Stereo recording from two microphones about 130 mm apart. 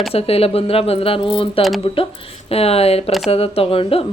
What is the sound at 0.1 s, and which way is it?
A man's voice, 50° left (ahead or behind).